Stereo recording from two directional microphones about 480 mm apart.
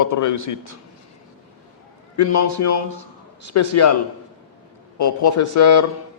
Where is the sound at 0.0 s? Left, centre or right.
Left.